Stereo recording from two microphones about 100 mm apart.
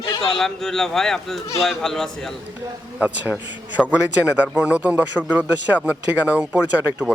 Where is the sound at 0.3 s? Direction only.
5° left (ahead or behind).